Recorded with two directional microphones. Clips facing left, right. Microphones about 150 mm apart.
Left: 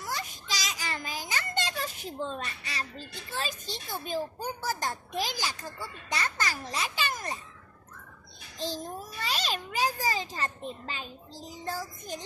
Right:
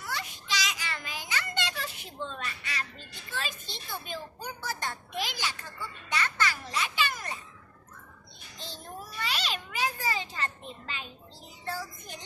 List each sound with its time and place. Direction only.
0.0 s child singing: 40° left (ahead or behind)
3.3 s a child's voice: 40° left (ahead or behind)
8.5 s a child's voice: 35° left (ahead or behind)